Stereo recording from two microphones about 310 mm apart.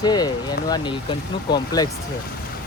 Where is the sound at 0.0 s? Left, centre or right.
Centre.